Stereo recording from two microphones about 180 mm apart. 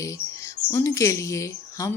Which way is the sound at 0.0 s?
15° left (ahead or behind).